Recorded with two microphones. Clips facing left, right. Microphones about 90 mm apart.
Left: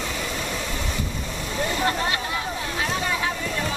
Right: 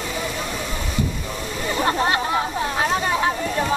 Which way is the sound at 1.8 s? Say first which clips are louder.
Right 8 dB; 35° right (ahead or behind).